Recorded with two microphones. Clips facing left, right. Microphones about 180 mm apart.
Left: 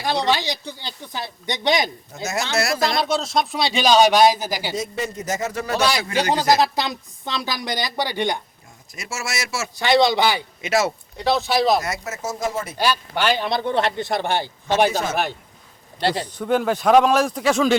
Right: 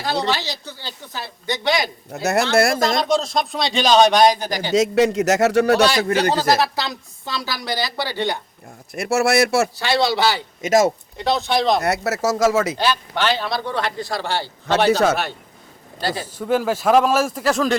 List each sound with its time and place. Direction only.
0.0 s speech: 15° left (ahead or behind)
2.1 s speech: 60° right (ahead or behind)
3.0 s speech: centre (ahead or behind)
4.7 s speech: 80° right
6.0 s speech: 50° right (ahead or behind)
6.3 s speech: 15° left (ahead or behind)
8.9 s speech: 60° right (ahead or behind)
9.7 s speech: 20° left (ahead or behind)
10.6 s speech: 45° right (ahead or behind)
11.2 s speech: centre (ahead or behind)
11.8 s speech: 70° right (ahead or behind); by 12.7 s 90° right
12.7 s a man's voice: 10° left (ahead or behind)
14.8 s speech: 70° right (ahead or behind)
16.2 s speech: 5° right (ahead or behind)